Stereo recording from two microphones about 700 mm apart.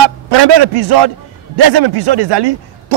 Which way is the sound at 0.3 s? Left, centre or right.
Right.